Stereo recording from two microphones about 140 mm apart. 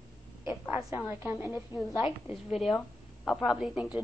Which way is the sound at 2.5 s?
Centre (ahead or behind).